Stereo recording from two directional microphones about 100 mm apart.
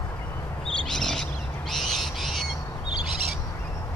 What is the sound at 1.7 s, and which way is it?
Owl, centre (ahead or behind).